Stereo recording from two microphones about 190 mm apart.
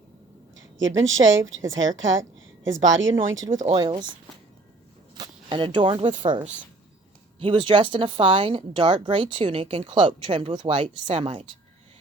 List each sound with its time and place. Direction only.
0.5 s a sound: 90° right
1.2 s speech: 90° right
3.8 s a woman's voice: 25° right (ahead or behind)
5.1 s speech: 25° right (ahead or behind)
7.3 s a woman's voice: 25° right (ahead or behind)